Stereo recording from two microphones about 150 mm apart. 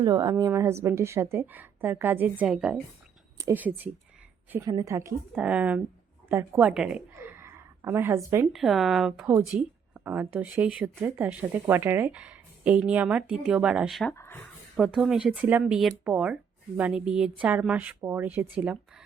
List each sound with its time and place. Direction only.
0.0 s a woman's voice: 25° right (ahead or behind); by 3.8 s 10° right (ahead or behind)
4.6 s a woman's voice: 25° right (ahead or behind); by 7.0 s 5° right (ahead or behind)
7.1 s a sound: 15° right (ahead or behind)
8.5 s a woman's voice: centre (ahead or behind)
14.1 s speech: 15° left (ahead or behind)
14.8 s a woman's voice: 5° right (ahead or behind)